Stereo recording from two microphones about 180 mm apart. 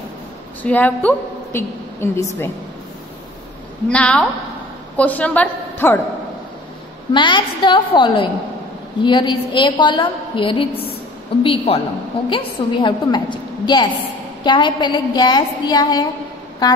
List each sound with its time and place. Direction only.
0.6 s a woman's voice: 10° left (ahead or behind)
3.9 s a woman's voice: 5° left (ahead or behind)
7.1 s a woman's voice: 25° left (ahead or behind)